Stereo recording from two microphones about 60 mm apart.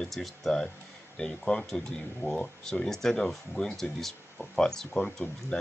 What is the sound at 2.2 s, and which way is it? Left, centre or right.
Speech, left.